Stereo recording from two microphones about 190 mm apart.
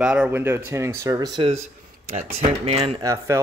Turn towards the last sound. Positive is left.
turn(degrees=-15)  # may be behind; listen again after turning